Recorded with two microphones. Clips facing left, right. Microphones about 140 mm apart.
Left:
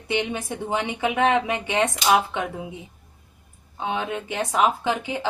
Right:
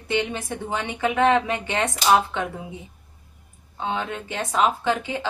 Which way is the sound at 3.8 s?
15° left (ahead or behind).